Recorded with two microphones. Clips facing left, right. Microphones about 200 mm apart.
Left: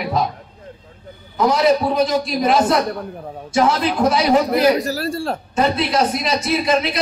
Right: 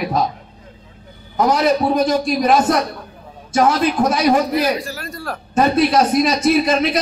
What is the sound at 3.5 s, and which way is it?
Speech, 50° right (ahead or behind).